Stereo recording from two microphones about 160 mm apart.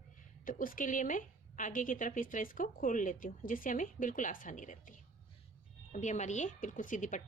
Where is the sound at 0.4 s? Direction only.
60° left (ahead or behind).